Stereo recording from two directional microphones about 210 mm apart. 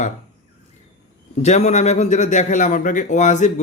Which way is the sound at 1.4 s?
35° left (ahead or behind).